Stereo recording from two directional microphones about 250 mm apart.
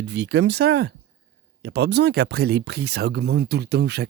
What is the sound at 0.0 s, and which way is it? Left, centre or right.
Speech, right.